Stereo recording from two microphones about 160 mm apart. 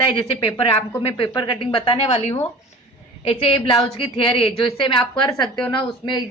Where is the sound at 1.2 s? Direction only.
30° left (ahead or behind).